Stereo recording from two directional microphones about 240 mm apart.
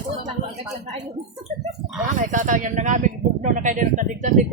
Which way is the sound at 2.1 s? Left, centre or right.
Right.